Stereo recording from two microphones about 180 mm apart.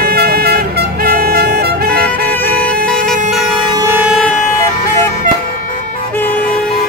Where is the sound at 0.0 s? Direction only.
60° right (ahead or behind).